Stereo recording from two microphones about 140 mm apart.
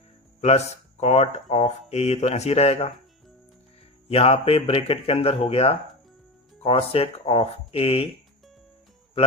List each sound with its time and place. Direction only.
0.4 s speech: 50° left (ahead or behind)
4.1 s speech: 45° left (ahead or behind)